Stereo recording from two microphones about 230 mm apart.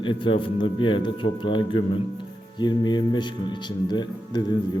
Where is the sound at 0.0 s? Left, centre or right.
Left.